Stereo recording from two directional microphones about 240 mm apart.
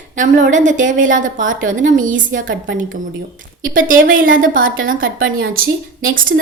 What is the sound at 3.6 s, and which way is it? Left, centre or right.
A woman's voice, right.